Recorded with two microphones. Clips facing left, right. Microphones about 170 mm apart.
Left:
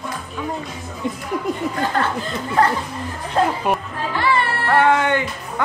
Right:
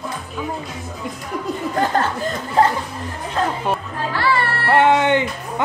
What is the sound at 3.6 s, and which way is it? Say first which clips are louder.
Chatter: left 1 dB; 15° left (ahead or behind).